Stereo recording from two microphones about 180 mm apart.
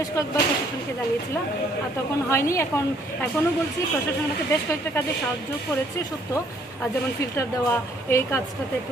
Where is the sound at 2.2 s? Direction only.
15° left (ahead or behind).